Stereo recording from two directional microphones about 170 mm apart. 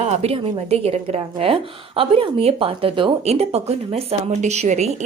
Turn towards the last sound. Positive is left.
turn(degrees=-40)  # may be behind; listen again after turning